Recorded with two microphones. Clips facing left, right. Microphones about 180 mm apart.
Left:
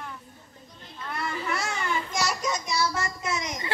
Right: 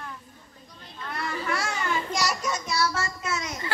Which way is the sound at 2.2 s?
20° left (ahead or behind).